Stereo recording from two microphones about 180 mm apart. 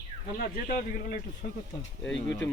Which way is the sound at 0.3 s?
55° left (ahead or behind).